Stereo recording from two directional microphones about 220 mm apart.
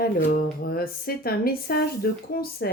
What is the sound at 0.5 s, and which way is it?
Speech, 40° left (ahead or behind).